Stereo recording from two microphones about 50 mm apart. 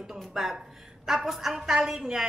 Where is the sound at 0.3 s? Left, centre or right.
Centre.